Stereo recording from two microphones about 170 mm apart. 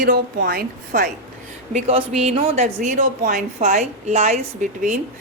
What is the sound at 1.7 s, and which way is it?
Speech, 35° right (ahead or behind).